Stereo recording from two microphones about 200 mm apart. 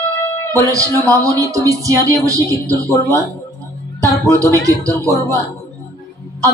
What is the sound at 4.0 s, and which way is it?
Speech, 15° right (ahead or behind).